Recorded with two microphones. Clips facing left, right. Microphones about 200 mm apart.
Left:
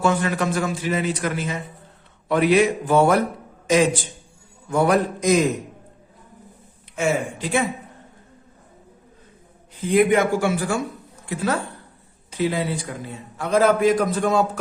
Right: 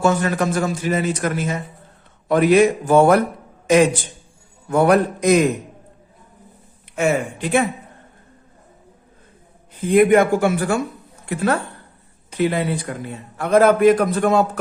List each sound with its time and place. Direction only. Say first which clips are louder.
0.0 s a man's voice: right 3 dB; 40° right (ahead or behind)
4.7 s a man's voice: right 4 dB; 60° right (ahead or behind)
6.9 s a man's voice: right 3 dB; 60° right (ahead or behind)
9.8 s a man's voice: right 4 dB; 55° right (ahead or behind)